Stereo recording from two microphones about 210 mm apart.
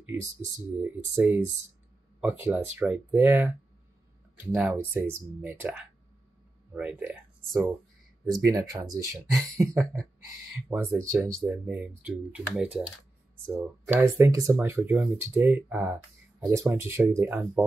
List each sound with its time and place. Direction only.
0.7 s speech: 10° right (ahead or behind)
4.6 s speech: 5° right (ahead or behind)
10.7 s speech: 10° right (ahead or behind)